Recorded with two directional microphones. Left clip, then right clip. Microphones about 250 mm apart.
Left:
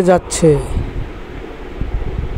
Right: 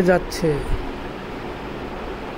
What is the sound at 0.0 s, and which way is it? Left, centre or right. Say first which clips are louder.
Speech: left 6 dB; left.